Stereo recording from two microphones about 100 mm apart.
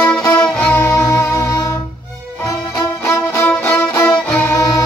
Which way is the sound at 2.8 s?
25° left (ahead or behind).